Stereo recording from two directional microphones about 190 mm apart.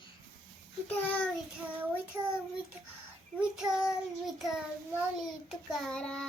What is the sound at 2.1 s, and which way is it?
Speech, 15° right (ahead or behind).